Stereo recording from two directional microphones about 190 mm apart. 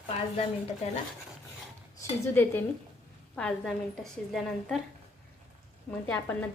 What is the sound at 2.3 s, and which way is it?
A woman's voice, 10° left (ahead or behind).